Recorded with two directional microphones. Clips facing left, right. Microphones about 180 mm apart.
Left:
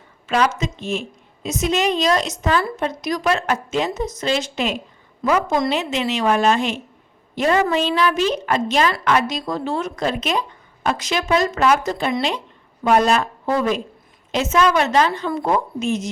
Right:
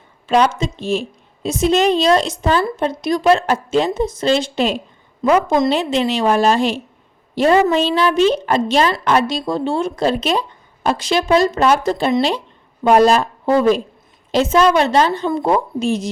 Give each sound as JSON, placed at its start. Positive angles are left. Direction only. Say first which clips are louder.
{"t": 0.3, "sound": "a woman's voice", "louder": "right 4 dB", "side_deg": -30}